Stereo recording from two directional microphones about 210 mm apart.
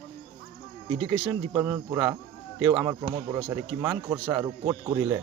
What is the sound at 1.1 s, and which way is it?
Speech, 10° right (ahead or behind).